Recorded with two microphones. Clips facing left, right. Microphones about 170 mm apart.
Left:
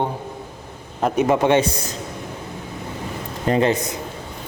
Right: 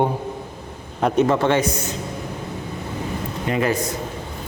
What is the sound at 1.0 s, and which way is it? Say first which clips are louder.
Speech: even; 10° left (ahead or behind).